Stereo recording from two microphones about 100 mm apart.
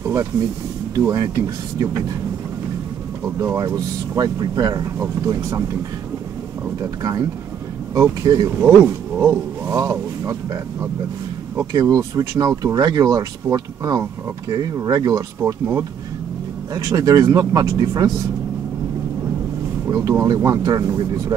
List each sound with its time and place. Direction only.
0.9 s speech: 35° right (ahead or behind)
3.3 s speech: 30° right (ahead or behind)
6.8 s speech: 35° right (ahead or behind)
7.9 s speech: 25° right (ahead or behind)
19.9 s speech: 35° right (ahead or behind)